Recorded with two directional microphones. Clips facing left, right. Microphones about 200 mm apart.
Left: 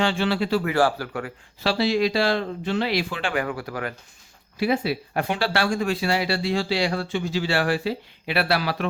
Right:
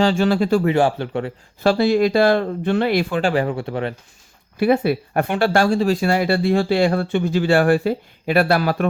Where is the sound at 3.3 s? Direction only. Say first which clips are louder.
Right 6 dB; 30° right (ahead or behind).